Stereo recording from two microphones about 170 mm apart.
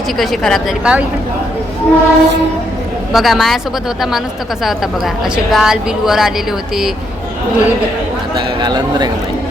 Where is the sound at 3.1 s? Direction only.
Centre (ahead or behind).